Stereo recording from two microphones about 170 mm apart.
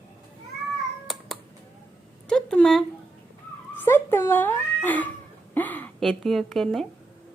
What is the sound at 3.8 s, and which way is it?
Cat, 15° left (ahead or behind).